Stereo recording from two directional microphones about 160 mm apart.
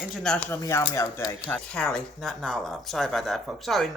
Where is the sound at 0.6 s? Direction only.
20° left (ahead or behind).